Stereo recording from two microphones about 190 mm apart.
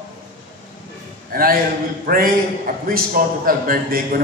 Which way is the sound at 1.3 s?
50° right (ahead or behind).